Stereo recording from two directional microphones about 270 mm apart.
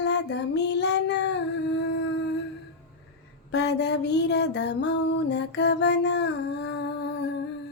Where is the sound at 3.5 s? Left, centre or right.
Left.